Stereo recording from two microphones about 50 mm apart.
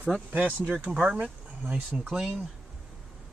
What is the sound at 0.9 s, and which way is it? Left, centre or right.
Speech, right.